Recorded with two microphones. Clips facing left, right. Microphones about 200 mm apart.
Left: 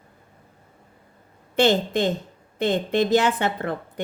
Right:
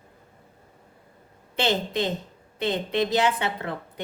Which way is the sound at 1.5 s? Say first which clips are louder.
Left 6 dB; 50° left (ahead or behind).